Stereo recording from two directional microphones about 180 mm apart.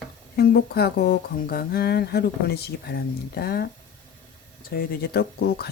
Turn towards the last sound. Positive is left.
turn(degrees=60)  # may be behind; listen again after turning